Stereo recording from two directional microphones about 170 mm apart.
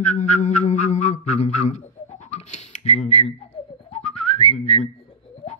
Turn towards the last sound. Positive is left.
turn(degrees=35)  # may be behind; listen again after turning